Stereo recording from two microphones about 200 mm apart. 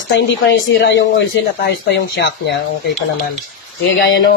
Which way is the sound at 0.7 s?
60° left (ahead or behind).